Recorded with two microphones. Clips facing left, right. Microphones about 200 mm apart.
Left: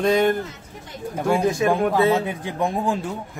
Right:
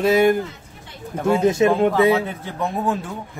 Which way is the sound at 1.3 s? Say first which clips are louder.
Right 4 dB; 25° right (ahead or behind).